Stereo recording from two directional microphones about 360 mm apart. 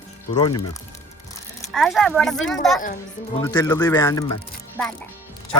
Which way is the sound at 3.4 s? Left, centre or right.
Centre.